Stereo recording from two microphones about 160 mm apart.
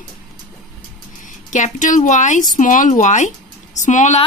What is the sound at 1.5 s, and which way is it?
A woman's voice, 50° left (ahead or behind).